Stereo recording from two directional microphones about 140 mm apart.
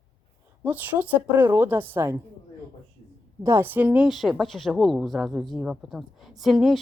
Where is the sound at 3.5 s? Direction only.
20° right (ahead or behind).